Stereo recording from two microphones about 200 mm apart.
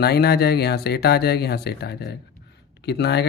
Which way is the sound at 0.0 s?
55° left (ahead or behind).